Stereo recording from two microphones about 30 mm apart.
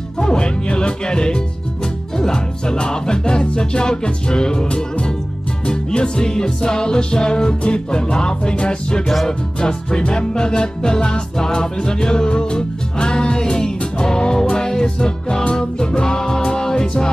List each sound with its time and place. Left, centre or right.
0.2 s music: left
6.3 s music: left